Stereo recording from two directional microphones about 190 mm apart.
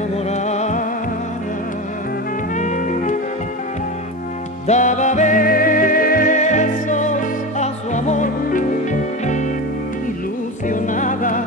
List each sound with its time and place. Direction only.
0.3 s music: 35° left (ahead or behind)
2.5 s music: 40° left (ahead or behind)
4.6 s music: 40° left (ahead or behind)
10.7 s music: 45° left (ahead or behind)